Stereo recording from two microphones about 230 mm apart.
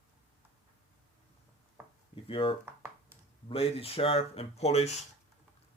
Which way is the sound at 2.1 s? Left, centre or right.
Left.